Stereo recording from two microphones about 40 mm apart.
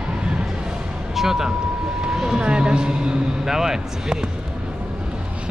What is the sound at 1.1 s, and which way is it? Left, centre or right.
Speech, centre.